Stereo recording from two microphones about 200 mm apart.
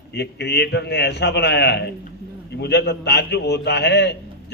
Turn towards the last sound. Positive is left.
turn(degrees=55)  # may be behind; listen again after turning